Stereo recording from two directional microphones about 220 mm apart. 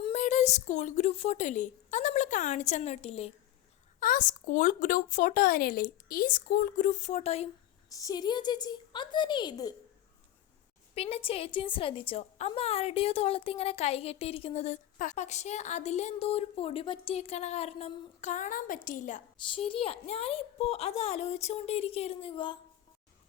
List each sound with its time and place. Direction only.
0.0 s a woman's voice: 30° left (ahead or behind)
4.0 s speech: 35° left (ahead or behind)
7.9 s a woman's voice: 15° left (ahead or behind)
10.9 s a woman's voice: 25° left (ahead or behind)